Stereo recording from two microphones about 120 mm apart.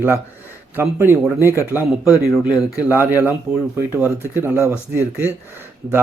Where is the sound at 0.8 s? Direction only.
20° right (ahead or behind).